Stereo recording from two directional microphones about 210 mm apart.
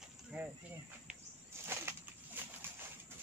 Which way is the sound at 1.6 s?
10° right (ahead or behind).